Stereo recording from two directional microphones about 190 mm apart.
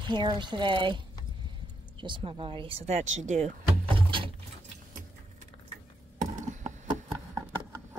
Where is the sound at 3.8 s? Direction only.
25° right (ahead or behind).